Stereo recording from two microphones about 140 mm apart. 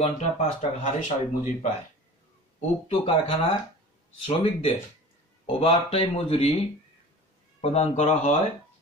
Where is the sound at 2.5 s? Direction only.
45° left (ahead or behind).